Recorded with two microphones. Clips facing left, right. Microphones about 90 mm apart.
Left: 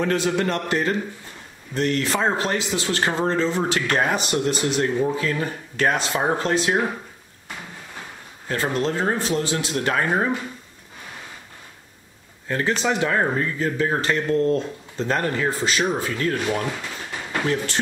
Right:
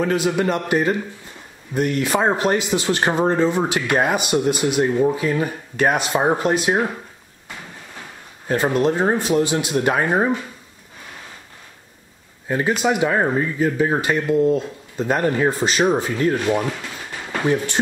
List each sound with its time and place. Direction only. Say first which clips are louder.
0.0 s a man's voice: right 2 dB; 5° right (ahead or behind)
8.5 s a man's voice: right 5 dB; 20° right (ahead or behind)
12.4 s a man's voice: right 3 dB; 10° right (ahead or behind)